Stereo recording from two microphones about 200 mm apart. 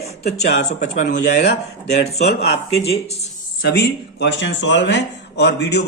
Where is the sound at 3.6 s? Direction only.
55° left (ahead or behind).